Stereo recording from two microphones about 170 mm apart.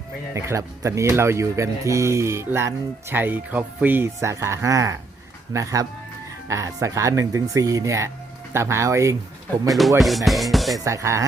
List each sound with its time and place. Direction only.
0.3 s speech: 15° right (ahead or behind)
9.6 s music: centre (ahead or behind)
10.8 s speech: 15° right (ahead or behind)